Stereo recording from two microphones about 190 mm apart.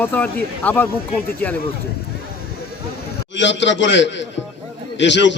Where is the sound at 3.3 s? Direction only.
70° left (ahead or behind).